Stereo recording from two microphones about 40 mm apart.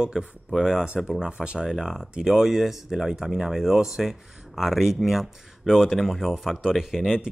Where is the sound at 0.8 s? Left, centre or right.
Right.